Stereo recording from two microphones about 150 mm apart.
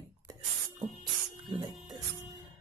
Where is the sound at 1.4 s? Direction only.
30° right (ahead or behind).